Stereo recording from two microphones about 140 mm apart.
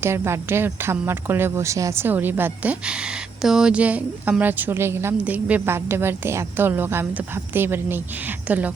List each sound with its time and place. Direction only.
0.0 s speech: 20° right (ahead or behind)